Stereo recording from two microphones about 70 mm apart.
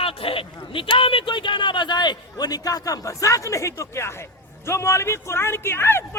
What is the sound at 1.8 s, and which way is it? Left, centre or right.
A man's voice, left.